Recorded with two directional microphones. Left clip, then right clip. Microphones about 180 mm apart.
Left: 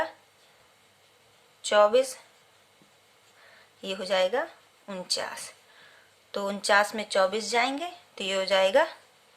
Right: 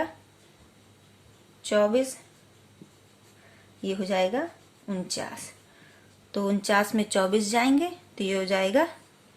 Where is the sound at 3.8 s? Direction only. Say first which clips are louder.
Even; 30° left (ahead or behind).